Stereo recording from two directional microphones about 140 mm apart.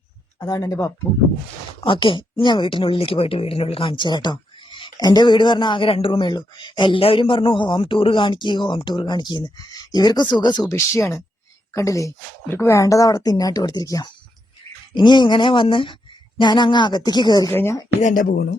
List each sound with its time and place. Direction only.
0.3 s speech: 25° left (ahead or behind)
1.8 s speech: 35° left (ahead or behind)
17.5 s a woman's voice: 15° left (ahead or behind)
18.0 s speech: 75° left (ahead or behind)